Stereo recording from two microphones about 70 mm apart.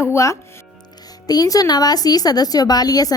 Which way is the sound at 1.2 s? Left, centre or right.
Left.